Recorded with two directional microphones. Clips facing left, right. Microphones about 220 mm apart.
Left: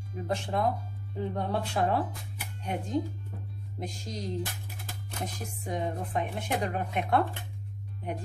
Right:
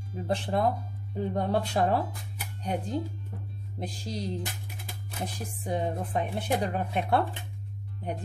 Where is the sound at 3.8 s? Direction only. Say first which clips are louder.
Right 2 dB; 30° right (ahead or behind).